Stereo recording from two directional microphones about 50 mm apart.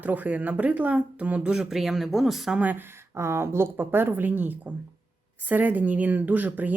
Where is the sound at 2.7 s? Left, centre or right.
Right.